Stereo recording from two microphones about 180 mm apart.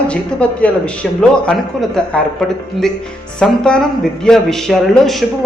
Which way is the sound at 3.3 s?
5° left (ahead or behind).